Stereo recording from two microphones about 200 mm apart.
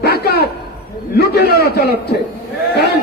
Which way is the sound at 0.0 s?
50° left (ahead or behind).